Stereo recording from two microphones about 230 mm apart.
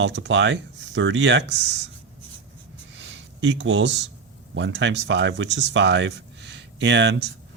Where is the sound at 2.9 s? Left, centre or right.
Right.